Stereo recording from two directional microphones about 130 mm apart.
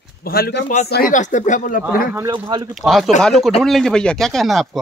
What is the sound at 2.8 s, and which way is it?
Speech, centre (ahead or behind).